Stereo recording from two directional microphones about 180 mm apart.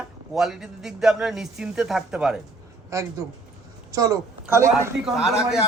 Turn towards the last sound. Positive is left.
turn(degrees=-5)  # may be behind; listen again after turning